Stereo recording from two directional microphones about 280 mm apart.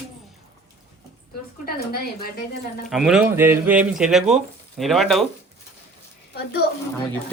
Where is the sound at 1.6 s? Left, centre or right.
Left.